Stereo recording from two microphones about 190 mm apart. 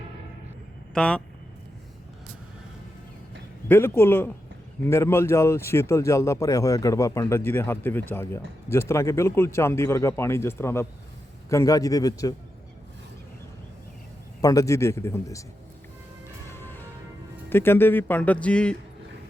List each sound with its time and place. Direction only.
0.9 s speech: 5° left (ahead or behind)
3.7 s speech: 10° left (ahead or behind)
14.4 s speech: 15° left (ahead or behind)
16.5 s music: 10° left (ahead or behind)
17.5 s speech: 10° left (ahead or behind)